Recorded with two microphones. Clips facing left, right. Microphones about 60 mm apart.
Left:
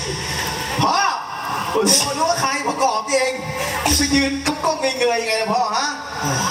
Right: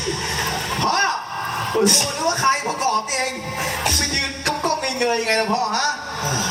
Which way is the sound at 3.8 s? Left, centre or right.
Left.